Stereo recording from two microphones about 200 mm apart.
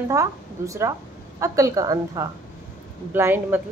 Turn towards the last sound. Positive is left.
turn(degrees=-10)  # may be behind; listen again after turning